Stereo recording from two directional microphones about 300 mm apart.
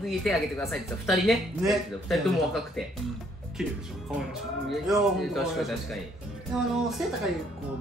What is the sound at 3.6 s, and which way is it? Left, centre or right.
A woman's voice, centre.